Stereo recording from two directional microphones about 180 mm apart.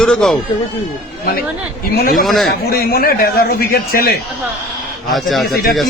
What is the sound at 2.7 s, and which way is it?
A man's voice, 55° left (ahead or behind).